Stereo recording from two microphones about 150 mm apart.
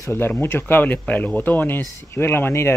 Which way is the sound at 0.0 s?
15° left (ahead or behind).